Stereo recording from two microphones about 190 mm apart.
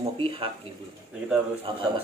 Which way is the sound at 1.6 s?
30° right (ahead or behind).